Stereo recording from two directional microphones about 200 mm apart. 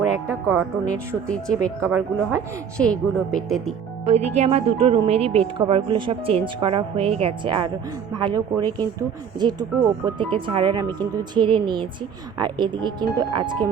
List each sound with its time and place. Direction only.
0.3 s speech: 15° right (ahead or behind)
0.9 s speech: 5° left (ahead or behind)
1.5 s speech: 15° right (ahead or behind)
2.7 s speech: 5° left (ahead or behind)
4.0 s speech: 35° right (ahead or behind)